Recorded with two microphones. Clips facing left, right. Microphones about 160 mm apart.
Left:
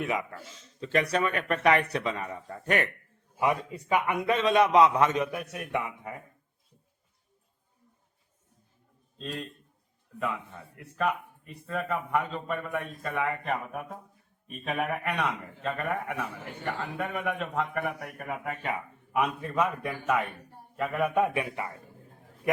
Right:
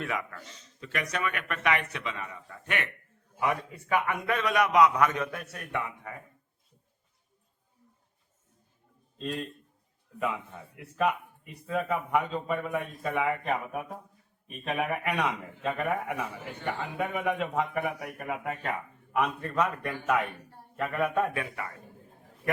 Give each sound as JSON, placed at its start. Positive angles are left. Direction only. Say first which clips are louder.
{"t": 0.0, "sound": "speech", "louder": "left 3 dB", "side_deg": 20}
{"t": 3.4, "sound": "a man's voice", "louder": "left 2 dB", "side_deg": 20}
{"t": 9.1, "sound": "a man's voice", "louder": "right 3 dB", "side_deg": 0}